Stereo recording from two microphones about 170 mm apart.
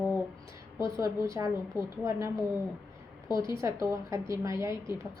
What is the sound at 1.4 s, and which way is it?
Speech, 15° right (ahead or behind).